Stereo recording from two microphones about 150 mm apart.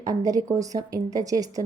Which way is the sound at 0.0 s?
25° right (ahead or behind).